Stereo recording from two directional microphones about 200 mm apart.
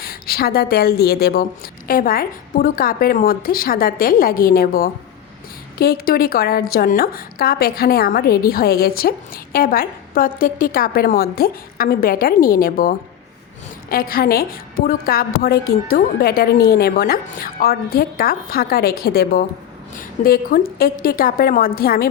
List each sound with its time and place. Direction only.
0.0 s a woman's voice: 50° left (ahead or behind)